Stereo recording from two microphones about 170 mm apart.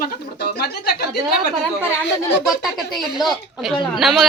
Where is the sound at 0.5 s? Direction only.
70° left (ahead or behind).